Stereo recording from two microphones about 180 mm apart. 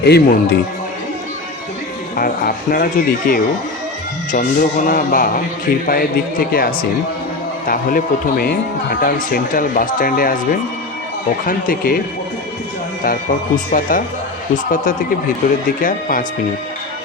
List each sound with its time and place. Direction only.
0.0 s a man's voice: 65° left (ahead or behind)
2.1 s a man's voice: 55° left (ahead or behind)
11.4 s speech: 50° left (ahead or behind)
13.1 s speech: 50° left (ahead or behind)